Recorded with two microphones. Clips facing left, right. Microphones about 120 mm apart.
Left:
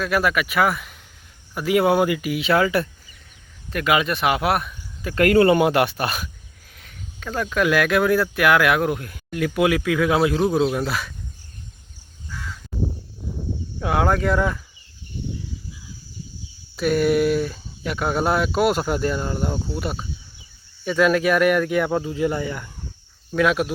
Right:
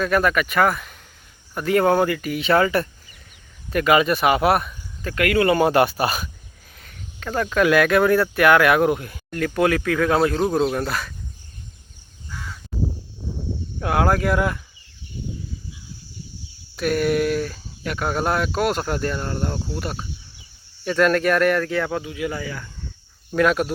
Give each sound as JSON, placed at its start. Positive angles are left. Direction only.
{"t": 0.0, "sound": "speech", "side_deg": 5}
{"t": 5.1, "sound": "speech", "side_deg": 35}
{"t": 5.5, "sound": "speech", "side_deg": 0}
{"t": 9.4, "sound": "speech", "side_deg": 10}
{"t": 13.7, "sound": "speech", "side_deg": 0}
{"t": 16.7, "sound": "speech", "side_deg": 0}
{"t": 22.0, "sound": "speech", "side_deg": 25}
{"t": 23.3, "sound": "speech", "side_deg": 0}